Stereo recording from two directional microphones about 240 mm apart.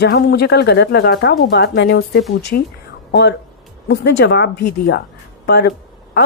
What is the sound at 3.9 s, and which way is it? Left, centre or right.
Speech, left.